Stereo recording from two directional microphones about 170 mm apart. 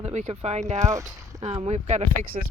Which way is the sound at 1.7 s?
40° right (ahead or behind).